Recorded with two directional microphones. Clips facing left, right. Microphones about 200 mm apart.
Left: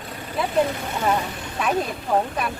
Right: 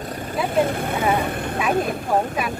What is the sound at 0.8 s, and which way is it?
Speech, 55° right (ahead or behind).